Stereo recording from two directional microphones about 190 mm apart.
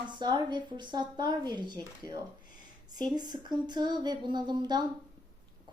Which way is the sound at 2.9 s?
20° right (ahead or behind).